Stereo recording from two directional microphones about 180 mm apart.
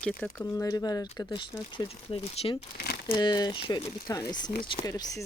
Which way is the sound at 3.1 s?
25° left (ahead or behind).